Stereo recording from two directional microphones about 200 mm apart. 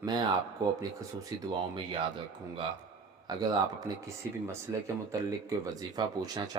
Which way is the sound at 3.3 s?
20° right (ahead or behind).